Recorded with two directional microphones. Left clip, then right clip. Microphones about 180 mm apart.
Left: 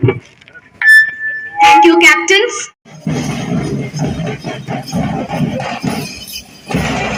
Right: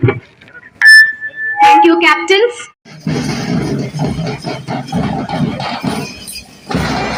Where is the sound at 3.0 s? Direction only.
5° left (ahead or behind).